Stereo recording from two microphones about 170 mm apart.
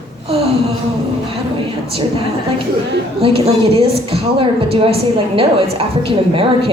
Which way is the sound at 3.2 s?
35° right (ahead or behind).